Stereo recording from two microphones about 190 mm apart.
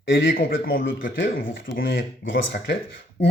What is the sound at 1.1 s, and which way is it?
Speech, 85° left.